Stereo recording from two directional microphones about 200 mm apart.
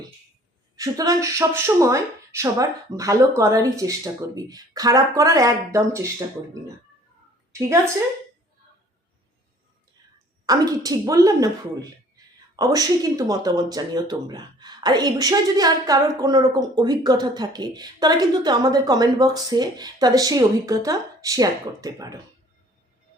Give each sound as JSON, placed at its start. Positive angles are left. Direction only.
{"t": 0.8, "sound": "speech", "side_deg": -15}
{"t": 10.4, "sound": "speech", "side_deg": -20}